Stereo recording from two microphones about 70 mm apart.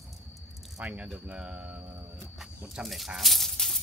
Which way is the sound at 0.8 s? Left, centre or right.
Centre.